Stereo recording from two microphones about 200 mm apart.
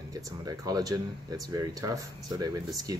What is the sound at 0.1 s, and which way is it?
Speech, 20° right (ahead or behind).